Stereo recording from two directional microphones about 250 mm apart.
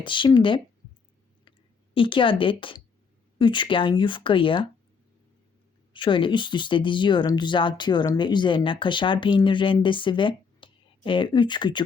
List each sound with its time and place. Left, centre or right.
0.0 s speech: centre
1.5 s a sound: left
3.3 s speech: centre
5.9 s speech: centre